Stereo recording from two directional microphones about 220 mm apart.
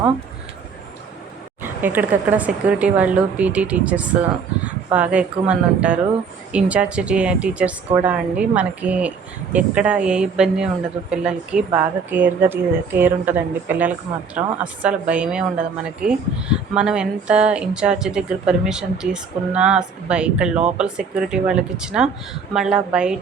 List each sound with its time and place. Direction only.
1.6 s speech: 10° right (ahead or behind)